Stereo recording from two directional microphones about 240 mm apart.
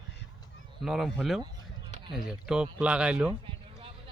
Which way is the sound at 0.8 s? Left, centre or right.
Centre.